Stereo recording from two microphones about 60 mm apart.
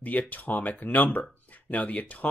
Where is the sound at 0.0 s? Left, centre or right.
Left.